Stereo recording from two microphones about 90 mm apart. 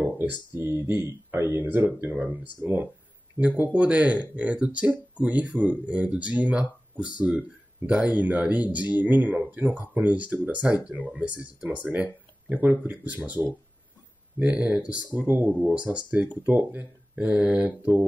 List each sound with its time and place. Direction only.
0.6 s speech: 25° right (ahead or behind)